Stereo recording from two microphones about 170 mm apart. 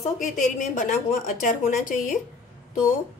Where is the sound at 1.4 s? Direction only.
45° left (ahead or behind).